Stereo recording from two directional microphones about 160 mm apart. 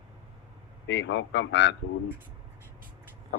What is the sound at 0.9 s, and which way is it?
Speech, 90° left.